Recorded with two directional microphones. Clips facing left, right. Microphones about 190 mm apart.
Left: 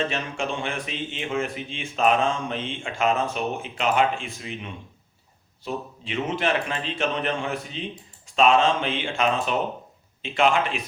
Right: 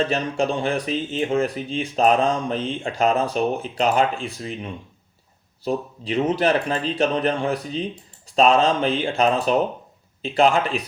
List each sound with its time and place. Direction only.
0.0 s speech: 35° right (ahead or behind)